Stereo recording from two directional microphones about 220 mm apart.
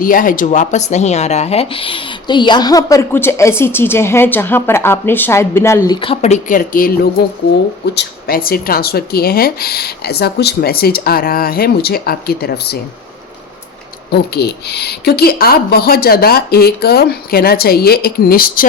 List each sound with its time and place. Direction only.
0.0 s speech: 40° left (ahead or behind); by 6.0 s 10° left (ahead or behind)
6.0 s speech: 25° left (ahead or behind); by 12.8 s 45° left (ahead or behind)
14.1 s speech: 45° left (ahead or behind)